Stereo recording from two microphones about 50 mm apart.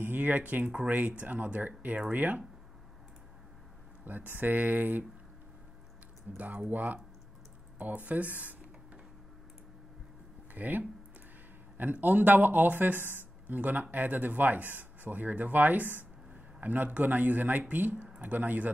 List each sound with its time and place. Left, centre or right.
0.0 s speech: right
4.0 s speech: right
6.3 s speech: right
10.5 s speech: right